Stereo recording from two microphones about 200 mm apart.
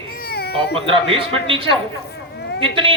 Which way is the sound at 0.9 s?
25° right (ahead or behind).